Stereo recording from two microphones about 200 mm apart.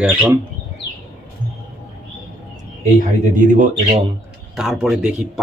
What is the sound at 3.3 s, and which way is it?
Speech, 40° right (ahead or behind).